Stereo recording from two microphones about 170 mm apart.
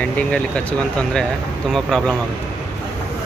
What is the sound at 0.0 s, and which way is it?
Speech, 5° left (ahead or behind).